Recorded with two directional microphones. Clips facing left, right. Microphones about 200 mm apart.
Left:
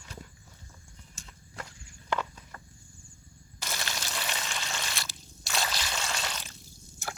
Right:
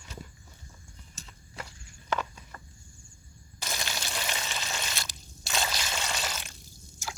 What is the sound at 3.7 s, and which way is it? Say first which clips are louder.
Water: right 1 dB; 15° right (ahead or behind).